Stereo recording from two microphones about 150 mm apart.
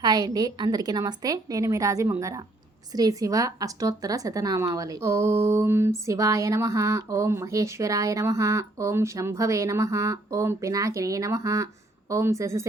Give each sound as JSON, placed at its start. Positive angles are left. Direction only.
{"t": 0.0, "sound": "a woman's voice", "side_deg": -25}